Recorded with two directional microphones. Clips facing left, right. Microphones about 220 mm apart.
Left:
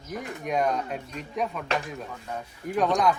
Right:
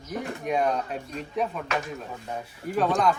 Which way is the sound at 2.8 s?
Centre (ahead or behind).